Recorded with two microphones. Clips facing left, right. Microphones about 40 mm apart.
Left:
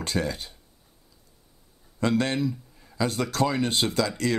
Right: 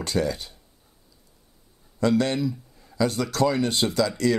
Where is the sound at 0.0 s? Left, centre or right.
Left.